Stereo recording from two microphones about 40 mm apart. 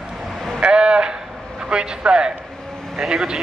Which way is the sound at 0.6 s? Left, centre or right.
Right.